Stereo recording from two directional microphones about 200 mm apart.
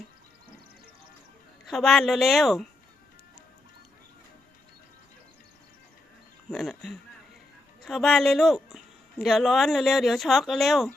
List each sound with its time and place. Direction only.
1.6 s speech: centre (ahead or behind)
6.5 s speech: centre (ahead or behind)